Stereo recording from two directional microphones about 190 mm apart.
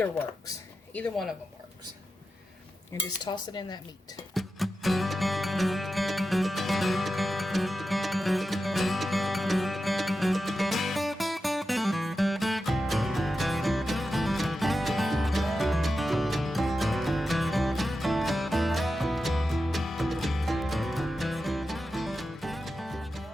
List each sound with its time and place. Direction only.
0.9 s speech: centre (ahead or behind)
2.9 s cutlery: 15° left (ahead or behind)
4.4 s music: centre (ahead or behind)